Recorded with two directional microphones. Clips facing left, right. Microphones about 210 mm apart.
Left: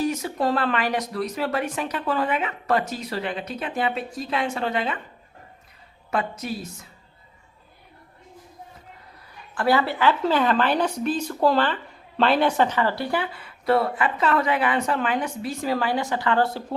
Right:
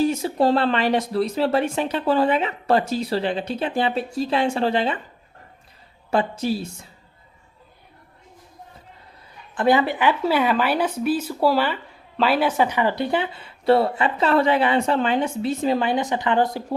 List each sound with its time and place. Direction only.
0.0 s speech: 30° right (ahead or behind)
6.1 s speech: 30° right (ahead or behind)
9.6 s speech: 20° right (ahead or behind)